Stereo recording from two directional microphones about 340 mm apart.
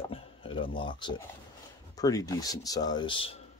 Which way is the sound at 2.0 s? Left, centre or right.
Centre.